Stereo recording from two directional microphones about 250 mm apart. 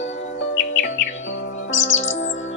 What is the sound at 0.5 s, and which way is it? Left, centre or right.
Music, left.